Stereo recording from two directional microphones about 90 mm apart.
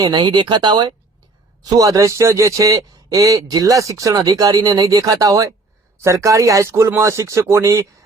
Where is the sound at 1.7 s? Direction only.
40° right (ahead or behind).